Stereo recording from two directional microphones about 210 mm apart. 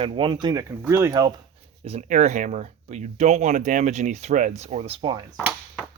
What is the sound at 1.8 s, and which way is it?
Speech, 30° right (ahead or behind).